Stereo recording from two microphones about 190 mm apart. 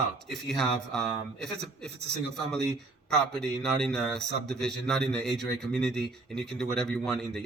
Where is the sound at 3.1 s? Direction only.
5° left (ahead or behind).